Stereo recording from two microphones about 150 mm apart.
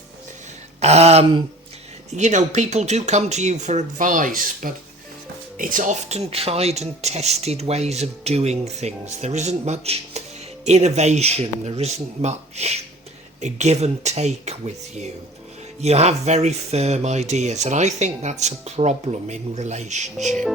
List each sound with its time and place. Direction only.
0.8 s speech: 45° right (ahead or behind)